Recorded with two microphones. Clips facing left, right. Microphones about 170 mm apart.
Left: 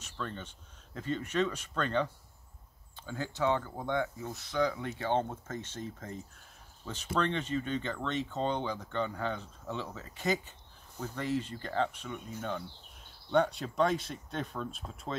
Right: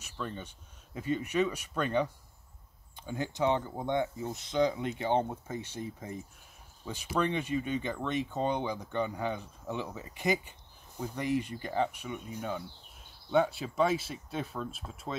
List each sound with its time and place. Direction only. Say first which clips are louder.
0.0 s speech: right 1 dB; 10° right (ahead or behind)